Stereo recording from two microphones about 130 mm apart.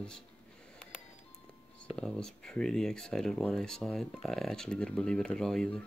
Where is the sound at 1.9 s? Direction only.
5° left (ahead or behind).